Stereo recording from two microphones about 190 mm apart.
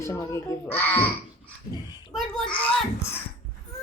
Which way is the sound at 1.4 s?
20° left (ahead or behind).